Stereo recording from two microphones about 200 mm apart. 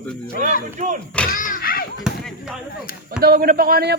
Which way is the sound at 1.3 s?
40° left (ahead or behind).